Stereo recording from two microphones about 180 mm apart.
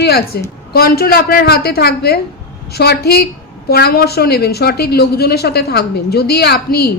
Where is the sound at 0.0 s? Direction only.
60° left (ahead or behind).